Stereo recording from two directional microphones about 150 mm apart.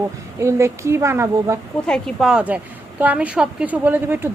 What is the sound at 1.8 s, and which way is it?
A woman's voice, 5° left (ahead or behind).